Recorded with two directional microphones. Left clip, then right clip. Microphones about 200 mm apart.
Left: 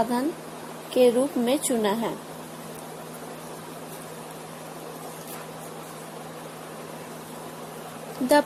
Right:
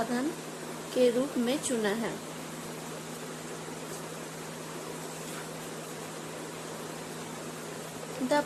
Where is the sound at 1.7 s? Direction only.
25° left (ahead or behind).